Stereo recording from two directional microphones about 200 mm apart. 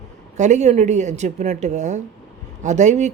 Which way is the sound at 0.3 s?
35° right (ahead or behind).